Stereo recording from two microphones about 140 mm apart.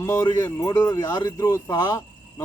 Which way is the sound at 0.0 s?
20° left (ahead or behind).